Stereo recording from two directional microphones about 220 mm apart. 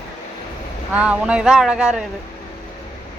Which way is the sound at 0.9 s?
5° right (ahead or behind).